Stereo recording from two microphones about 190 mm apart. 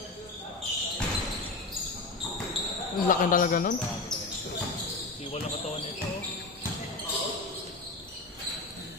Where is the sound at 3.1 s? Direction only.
45° left (ahead or behind).